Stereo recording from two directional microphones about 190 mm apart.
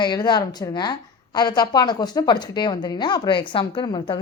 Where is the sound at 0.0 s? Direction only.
25° left (ahead or behind).